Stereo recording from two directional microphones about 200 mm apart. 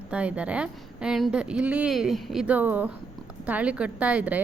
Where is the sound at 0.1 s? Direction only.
5° right (ahead or behind).